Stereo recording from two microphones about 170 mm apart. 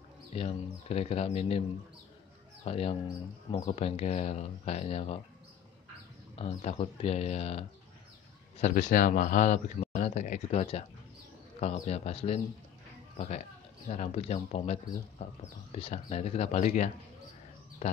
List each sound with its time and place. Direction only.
0.3 s speech: 35° left (ahead or behind)
2.6 s speech: 40° left (ahead or behind)
6.3 s speech: 35° left (ahead or behind)